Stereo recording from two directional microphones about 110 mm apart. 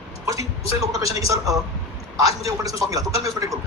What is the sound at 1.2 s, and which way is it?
A man's voice, 30° right (ahead or behind).